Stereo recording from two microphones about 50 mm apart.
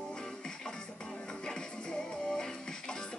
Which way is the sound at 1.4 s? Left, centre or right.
Centre.